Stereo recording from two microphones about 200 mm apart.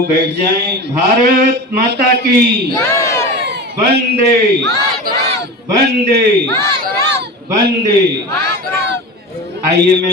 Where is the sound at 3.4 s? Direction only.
60° right (ahead or behind).